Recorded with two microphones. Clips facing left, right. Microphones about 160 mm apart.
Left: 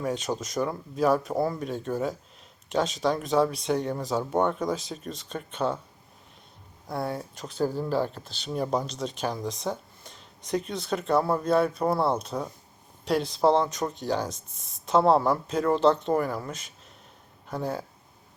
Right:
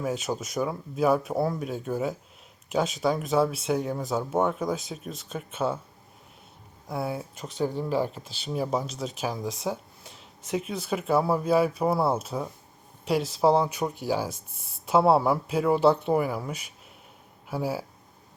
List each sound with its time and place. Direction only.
0.0 s speech: 5° right (ahead or behind)
6.8 s speech: 5° right (ahead or behind)